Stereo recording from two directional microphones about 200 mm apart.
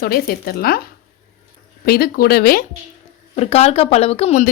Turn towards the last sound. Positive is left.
turn(degrees=30)  # may be behind; listen again after turning